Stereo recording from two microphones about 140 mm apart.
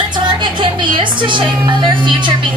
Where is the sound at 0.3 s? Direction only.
35° right (ahead or behind).